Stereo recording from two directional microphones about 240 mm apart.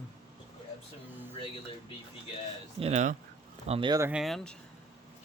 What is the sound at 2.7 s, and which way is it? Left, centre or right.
Speech, right.